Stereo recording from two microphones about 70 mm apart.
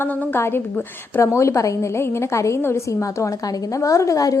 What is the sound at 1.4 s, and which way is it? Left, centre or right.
A woman's voice, left.